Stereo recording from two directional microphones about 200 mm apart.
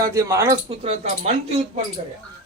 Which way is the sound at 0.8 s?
35° right (ahead or behind).